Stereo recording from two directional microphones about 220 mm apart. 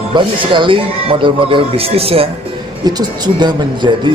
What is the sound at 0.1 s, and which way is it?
Speech, 20° right (ahead or behind).